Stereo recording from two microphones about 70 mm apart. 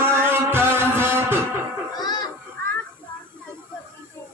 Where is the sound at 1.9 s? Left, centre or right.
Left.